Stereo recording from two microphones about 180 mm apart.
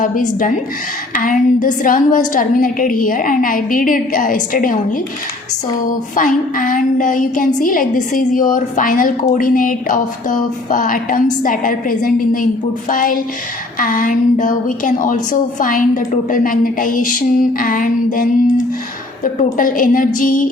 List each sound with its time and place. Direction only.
0.0 s a woman's voice: 45° left (ahead or behind)
6.1 s a woman's voice: 50° left (ahead or behind)